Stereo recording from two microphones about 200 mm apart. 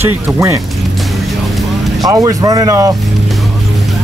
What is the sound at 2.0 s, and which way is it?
Speech, 15° right (ahead or behind).